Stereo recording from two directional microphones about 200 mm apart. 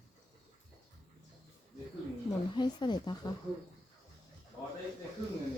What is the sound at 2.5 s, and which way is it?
Speech, 20° left (ahead or behind).